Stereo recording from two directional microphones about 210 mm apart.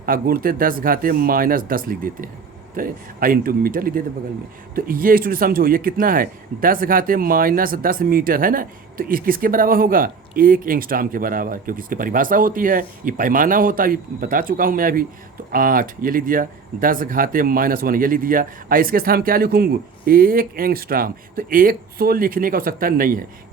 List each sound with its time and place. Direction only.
0.0 s speech: 45° right (ahead or behind)